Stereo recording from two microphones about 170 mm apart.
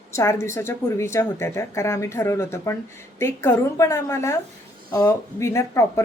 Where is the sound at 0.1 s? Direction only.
15° left (ahead or behind).